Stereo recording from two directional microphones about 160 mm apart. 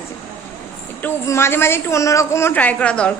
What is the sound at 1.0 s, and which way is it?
A woman's voice, 15° left (ahead or behind).